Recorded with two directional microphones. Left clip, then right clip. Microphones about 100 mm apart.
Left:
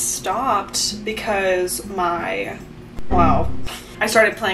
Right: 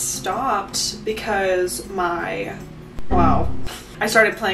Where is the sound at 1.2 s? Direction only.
20° left (ahead or behind).